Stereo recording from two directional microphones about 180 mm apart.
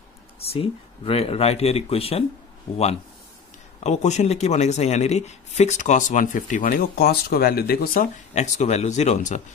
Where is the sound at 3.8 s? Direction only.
40° left (ahead or behind).